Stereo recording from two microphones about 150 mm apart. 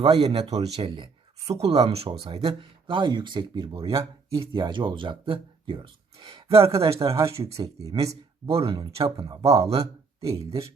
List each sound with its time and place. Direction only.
0.0 s speech: 40° right (ahead or behind)
6.7 s speech: 20° right (ahead or behind)
8.4 s speech: 35° right (ahead or behind)
10.2 s speech: 20° right (ahead or behind)